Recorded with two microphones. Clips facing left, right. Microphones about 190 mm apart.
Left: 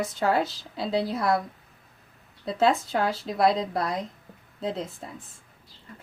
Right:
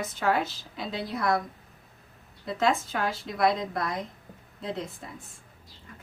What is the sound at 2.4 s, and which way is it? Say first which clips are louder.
Speech: left 3 dB; 30° left (ahead or behind).